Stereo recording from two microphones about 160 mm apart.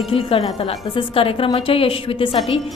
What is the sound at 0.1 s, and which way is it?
A woman's voice, 35° left (ahead or behind).